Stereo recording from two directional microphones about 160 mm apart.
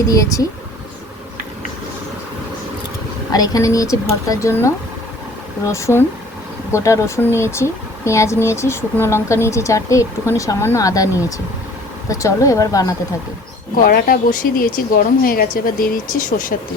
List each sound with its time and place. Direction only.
0.1 s speech: 20° left (ahead or behind)
3.3 s speech: 25° left (ahead or behind)
13.8 s speech: 65° left (ahead or behind)